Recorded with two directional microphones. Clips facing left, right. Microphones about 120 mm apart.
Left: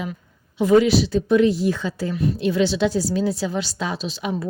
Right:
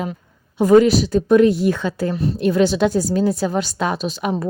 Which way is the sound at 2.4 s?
50° right (ahead or behind).